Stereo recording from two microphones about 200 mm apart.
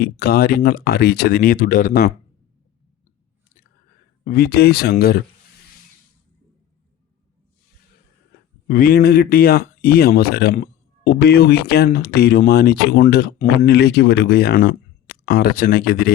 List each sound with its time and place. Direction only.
0.0 s speech: 50° left (ahead or behind)
4.2 s speech: 50° left (ahead or behind)
8.6 s speech: 45° left (ahead or behind)